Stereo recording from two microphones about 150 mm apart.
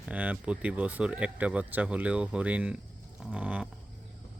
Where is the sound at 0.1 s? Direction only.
10° right (ahead or behind).